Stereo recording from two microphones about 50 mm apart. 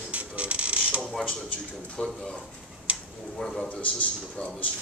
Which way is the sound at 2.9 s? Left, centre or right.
Right.